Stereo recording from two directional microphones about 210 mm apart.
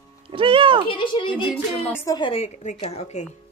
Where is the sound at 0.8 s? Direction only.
25° left (ahead or behind).